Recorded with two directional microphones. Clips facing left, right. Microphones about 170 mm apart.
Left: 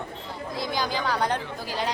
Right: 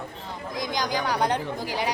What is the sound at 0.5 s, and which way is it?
Speech, 15° right (ahead or behind).